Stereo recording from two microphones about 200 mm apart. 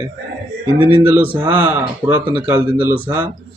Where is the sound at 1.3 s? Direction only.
10° right (ahead or behind).